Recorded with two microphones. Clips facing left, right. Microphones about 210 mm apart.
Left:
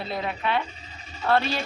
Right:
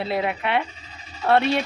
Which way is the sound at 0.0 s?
65° right (ahead or behind).